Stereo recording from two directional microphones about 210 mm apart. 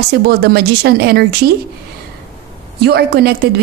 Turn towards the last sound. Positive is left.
turn(degrees=-50)  # may be behind; listen again after turning